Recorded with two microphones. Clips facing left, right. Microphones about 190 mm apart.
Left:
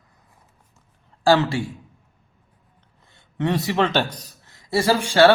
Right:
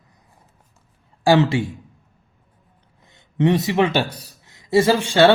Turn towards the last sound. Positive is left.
turn(degrees=-20)  # may be behind; listen again after turning